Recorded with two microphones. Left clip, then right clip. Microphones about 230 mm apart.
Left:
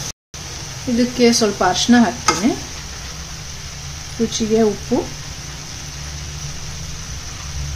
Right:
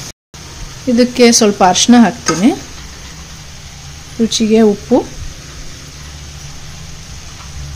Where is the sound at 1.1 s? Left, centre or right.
Right.